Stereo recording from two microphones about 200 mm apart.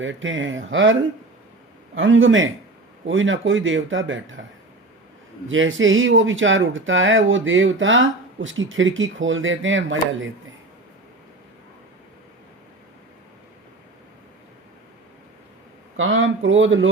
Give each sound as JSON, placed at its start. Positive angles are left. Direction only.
{"t": 0.0, "sound": "speech", "side_deg": -70}
{"t": 2.0, "sound": "speech", "side_deg": -70}
{"t": 5.5, "sound": "speech", "side_deg": -75}
{"t": 16.0, "sound": "speech", "side_deg": -80}